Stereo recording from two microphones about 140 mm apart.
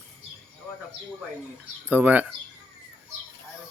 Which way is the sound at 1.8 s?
10° right (ahead or behind).